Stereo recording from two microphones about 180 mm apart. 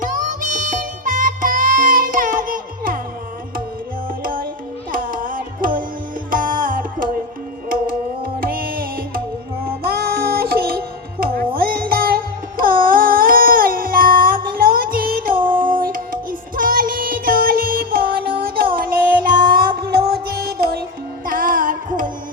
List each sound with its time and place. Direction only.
0.0 s music: 45° right (ahead or behind)
4.2 s music: 50° right (ahead or behind)
7.7 s tabla: 50° right (ahead or behind)
9.8 s music: 60° right (ahead or behind)
15.4 s music: 25° right (ahead or behind)
15.6 s music: 50° right (ahead or behind)